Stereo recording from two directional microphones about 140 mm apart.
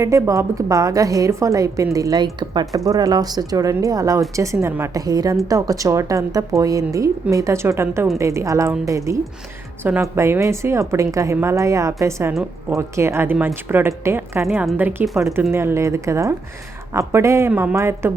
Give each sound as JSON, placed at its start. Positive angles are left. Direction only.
{"t": 0.0, "sound": "a woman's voice", "side_deg": -20}
{"t": 14.4, "sound": "speech", "side_deg": -5}
{"t": 15.0, "sound": "speech", "side_deg": 0}
{"t": 15.5, "sound": "a woman's voice", "side_deg": -20}